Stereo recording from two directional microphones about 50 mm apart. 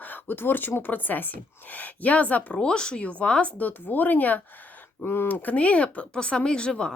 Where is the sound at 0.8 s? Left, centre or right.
Left.